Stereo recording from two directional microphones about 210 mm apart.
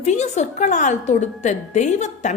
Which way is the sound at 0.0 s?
35° left (ahead or behind).